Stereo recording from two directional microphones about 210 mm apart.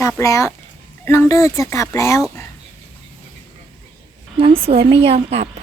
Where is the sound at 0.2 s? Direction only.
15° left (ahead or behind).